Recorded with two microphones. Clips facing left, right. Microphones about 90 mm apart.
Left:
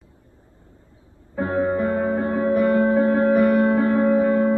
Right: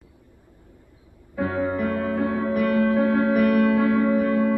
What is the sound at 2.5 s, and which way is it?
Music, 30° left (ahead or behind).